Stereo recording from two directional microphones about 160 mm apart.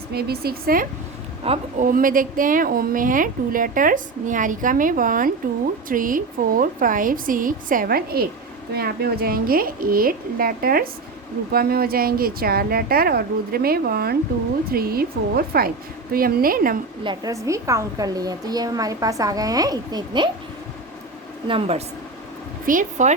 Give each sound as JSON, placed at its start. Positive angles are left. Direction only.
{"t": 0.1, "sound": "a woman's voice", "side_deg": -80}
{"t": 1.5, "sound": "speech", "side_deg": -40}
{"t": 1.8, "sound": "a woman's voice", "side_deg": -60}
{"t": 17.0, "sound": "a woman's voice", "side_deg": -25}
{"t": 21.4, "sound": "speech", "side_deg": -35}
{"t": 22.6, "sound": "speech", "side_deg": -55}